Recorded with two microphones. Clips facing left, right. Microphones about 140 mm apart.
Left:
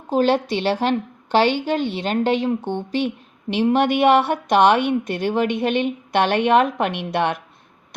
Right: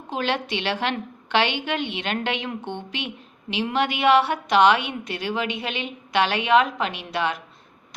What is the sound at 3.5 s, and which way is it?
A woman's voice, 50° left (ahead or behind).